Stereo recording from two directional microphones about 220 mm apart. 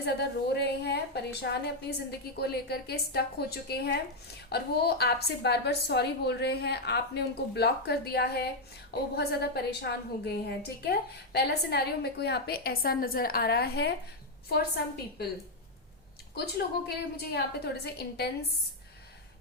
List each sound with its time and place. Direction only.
0.0 s a woman's voice: 50° left (ahead or behind)
16.3 s a woman's voice: 45° left (ahead or behind)